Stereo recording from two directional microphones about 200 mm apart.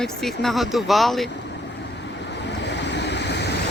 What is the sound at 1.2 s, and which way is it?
Vehicle, 60° left (ahead or behind).